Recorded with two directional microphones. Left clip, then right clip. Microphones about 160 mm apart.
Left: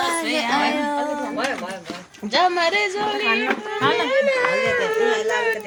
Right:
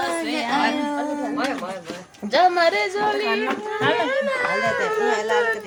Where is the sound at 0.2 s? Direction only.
10° left (ahead or behind).